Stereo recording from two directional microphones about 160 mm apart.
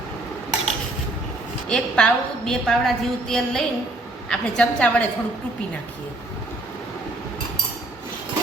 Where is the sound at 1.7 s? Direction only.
5° left (ahead or behind).